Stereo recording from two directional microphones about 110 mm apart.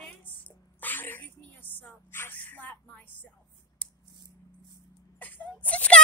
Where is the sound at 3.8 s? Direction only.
15° left (ahead or behind).